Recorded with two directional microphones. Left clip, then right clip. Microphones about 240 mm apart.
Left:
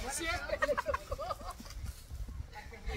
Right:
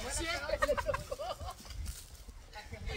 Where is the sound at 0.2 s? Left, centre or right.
Centre.